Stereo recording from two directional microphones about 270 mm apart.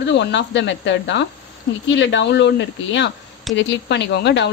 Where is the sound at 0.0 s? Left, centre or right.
Left.